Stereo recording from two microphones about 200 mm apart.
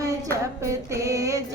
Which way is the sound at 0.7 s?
15° right (ahead or behind).